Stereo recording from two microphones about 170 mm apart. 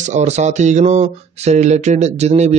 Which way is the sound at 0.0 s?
45° right (ahead or behind).